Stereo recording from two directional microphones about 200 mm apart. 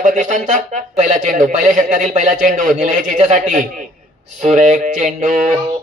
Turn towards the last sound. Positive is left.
turn(degrees=-40)  # may be behind; listen again after turning